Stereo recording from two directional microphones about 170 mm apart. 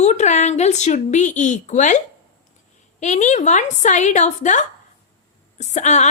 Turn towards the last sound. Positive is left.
turn(degrees=40)  # may be behind; listen again after turning